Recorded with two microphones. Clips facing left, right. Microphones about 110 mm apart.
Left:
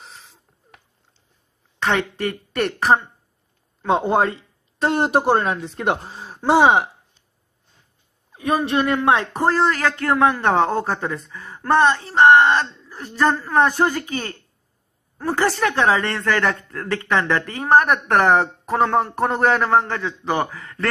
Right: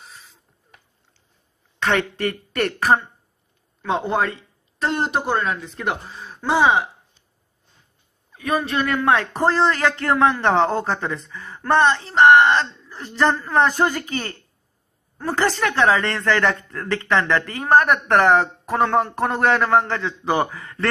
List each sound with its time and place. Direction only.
1.8 s a man's voice: 10° left (ahead or behind)
3.8 s speech: 30° left (ahead or behind)
5.0 s speech: 45° left (ahead or behind)
8.3 s a man's voice: 25° left (ahead or behind); by 20.2 s 10° left (ahead or behind)
20.2 s a man's voice: 5° right (ahead or behind)